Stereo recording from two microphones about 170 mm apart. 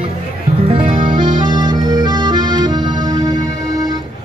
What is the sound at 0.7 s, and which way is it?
Music, 30° right (ahead or behind).